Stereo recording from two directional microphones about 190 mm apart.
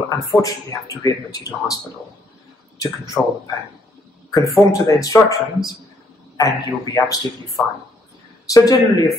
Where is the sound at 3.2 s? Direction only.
10° left (ahead or behind).